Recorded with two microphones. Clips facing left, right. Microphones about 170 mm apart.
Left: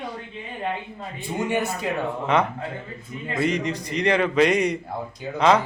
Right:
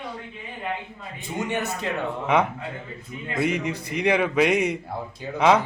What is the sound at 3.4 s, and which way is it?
Speech, 10° right (ahead or behind).